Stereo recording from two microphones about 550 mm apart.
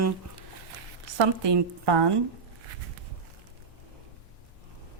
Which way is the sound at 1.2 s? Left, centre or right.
Right.